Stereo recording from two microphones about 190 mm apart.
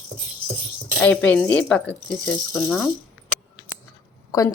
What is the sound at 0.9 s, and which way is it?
Speech, 5° left (ahead or behind).